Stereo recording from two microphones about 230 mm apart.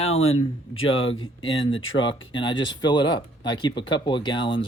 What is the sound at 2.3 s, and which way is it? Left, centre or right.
Speech, left.